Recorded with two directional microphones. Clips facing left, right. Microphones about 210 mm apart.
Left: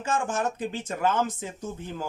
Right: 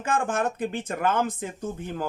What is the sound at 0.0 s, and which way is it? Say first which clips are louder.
Speech: right 2 dB; 55° right (ahead or behind).